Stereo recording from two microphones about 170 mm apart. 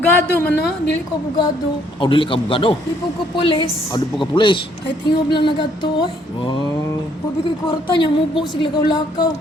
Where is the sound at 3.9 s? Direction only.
30° left (ahead or behind).